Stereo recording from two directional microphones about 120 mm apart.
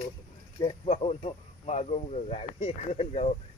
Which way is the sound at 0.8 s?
65° left (ahead or behind).